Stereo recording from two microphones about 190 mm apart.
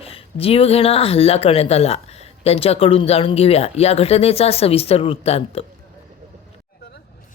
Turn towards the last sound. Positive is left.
turn(degrees=30)  # may be behind; listen again after turning